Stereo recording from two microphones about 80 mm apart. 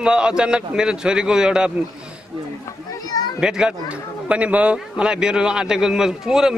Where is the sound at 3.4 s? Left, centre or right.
Centre.